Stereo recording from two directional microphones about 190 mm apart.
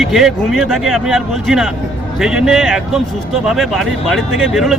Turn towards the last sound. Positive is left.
turn(degrees=0)  # may be behind; listen again after turning